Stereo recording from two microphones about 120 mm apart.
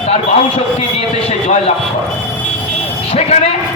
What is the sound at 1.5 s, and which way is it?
Speech, 65° left (ahead or behind).